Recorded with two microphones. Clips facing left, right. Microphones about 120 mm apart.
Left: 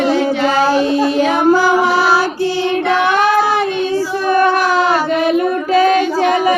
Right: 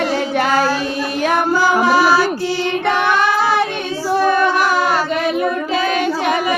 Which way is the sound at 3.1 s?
55° left (ahead or behind).